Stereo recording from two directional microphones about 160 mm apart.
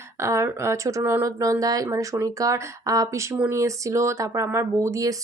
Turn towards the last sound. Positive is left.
turn(degrees=-20)  # may be behind; listen again after turning